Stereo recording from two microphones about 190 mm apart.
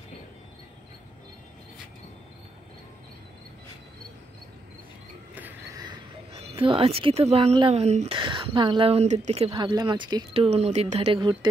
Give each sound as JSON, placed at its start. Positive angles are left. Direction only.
{"t": 5.8, "sound": "speech", "side_deg": -25}